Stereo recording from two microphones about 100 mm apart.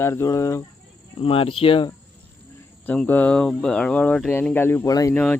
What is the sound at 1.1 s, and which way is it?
Speech, 70° left (ahead or behind).